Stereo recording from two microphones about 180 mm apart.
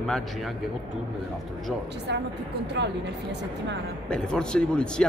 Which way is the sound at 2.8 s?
80° right.